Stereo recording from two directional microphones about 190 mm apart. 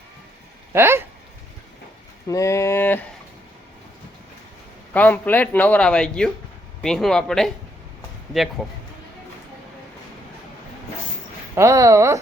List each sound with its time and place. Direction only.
0.7 s speech: 10° right (ahead or behind)
2.2 s a man's voice: 15° left (ahead or behind)
4.9 s a man's voice: 10° left (ahead or behind)
11.5 s speech: 15° right (ahead or behind)